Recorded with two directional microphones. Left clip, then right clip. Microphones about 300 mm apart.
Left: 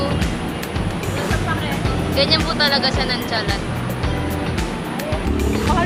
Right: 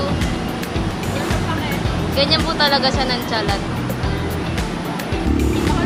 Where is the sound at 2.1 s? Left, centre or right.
Centre.